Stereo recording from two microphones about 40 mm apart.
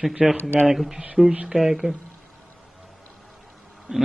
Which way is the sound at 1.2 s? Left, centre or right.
Right.